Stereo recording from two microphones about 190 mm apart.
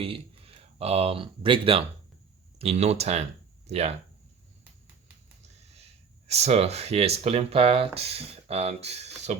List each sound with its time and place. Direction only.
0.0 s speech: 30° right (ahead or behind)
5.7 s speech: 35° right (ahead or behind)